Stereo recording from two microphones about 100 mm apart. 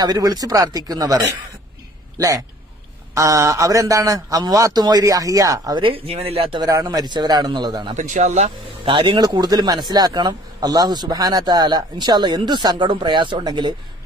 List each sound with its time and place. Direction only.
0.0 s a man's voice: 40° right (ahead or behind)
5.8 s speech: 60° right (ahead or behind)
6.6 s speech: 35° right (ahead or behind)
8.8 s speech: 60° right (ahead or behind)
9.2 s speech: 45° right (ahead or behind)
13.4 s speech: 45° right (ahead or behind)